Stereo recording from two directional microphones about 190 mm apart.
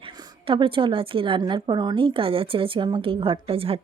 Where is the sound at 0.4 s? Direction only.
25° right (ahead or behind).